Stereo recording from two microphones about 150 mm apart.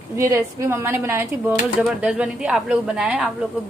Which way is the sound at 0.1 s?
20° right (ahead or behind).